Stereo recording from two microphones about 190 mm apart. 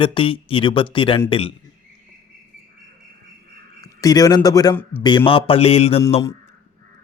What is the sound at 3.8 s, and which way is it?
Speech, 20° left (ahead or behind).